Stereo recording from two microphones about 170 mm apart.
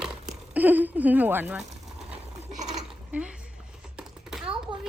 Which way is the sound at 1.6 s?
40° right (ahead or behind).